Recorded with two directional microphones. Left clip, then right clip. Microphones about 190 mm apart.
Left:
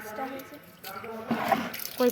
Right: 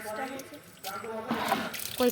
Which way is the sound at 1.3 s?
20° left (ahead or behind).